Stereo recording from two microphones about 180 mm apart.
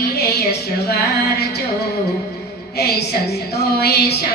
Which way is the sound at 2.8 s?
60° left (ahead or behind).